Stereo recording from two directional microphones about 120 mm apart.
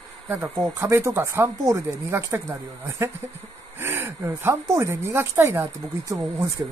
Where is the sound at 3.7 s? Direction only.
20° right (ahead or behind).